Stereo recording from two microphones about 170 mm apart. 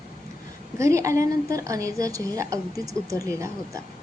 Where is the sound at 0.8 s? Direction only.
20° right (ahead or behind).